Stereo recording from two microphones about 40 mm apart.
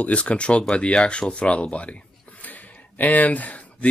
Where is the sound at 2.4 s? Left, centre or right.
Left.